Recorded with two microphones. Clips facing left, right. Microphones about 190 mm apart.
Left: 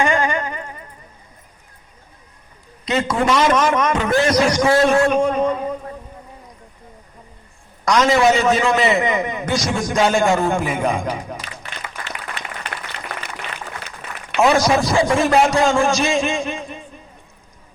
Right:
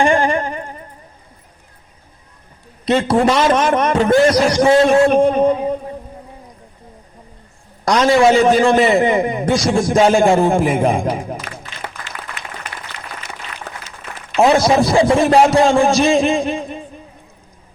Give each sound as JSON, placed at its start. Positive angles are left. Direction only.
{"t": 0.0, "sound": "a sound", "side_deg": -30}
{"t": 2.8, "sound": "a man's voice", "side_deg": -30}
{"t": 7.9, "sound": "a man's voice", "side_deg": -30}
{"t": 14.3, "sound": "a man's voice", "side_deg": -35}